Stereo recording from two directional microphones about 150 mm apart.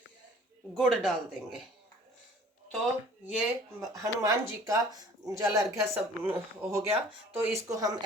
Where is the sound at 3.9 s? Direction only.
20° right (ahead or behind).